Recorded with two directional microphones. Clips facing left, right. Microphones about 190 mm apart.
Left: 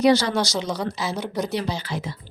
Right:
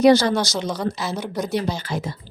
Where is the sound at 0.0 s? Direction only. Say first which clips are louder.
Right 4 dB; 45° right (ahead or behind).